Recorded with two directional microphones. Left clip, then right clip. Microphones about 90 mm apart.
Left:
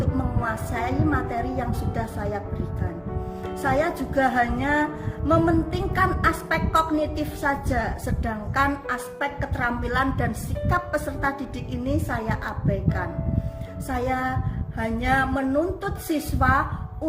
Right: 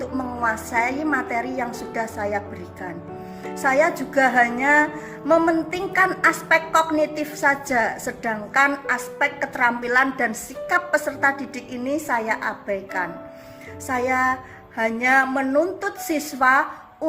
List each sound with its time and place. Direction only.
0.4 s a woman's voice: 40° left (ahead or behind)
3.6 s a woman's voice: 35° left (ahead or behind)